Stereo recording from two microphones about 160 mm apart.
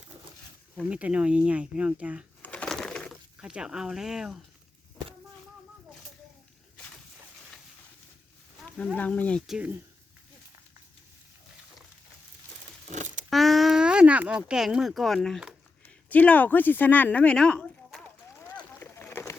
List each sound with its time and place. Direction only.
0.8 s speech: 10° right (ahead or behind)
2.4 s bird: 10° left (ahead or behind)
3.4 s speech: 5° right (ahead or behind)
8.8 s speech: 10° left (ahead or behind)
12.9 s speech: 50° right (ahead or behind)
13.3 s speech: centre (ahead or behind)
15.8 s speech: 10° left (ahead or behind)
18.8 s a sound: 15° left (ahead or behind)